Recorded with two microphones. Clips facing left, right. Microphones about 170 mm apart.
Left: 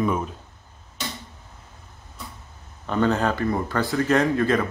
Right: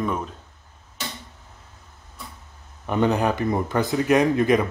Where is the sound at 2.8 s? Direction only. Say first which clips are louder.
Right 1 dB; 15° right (ahead or behind).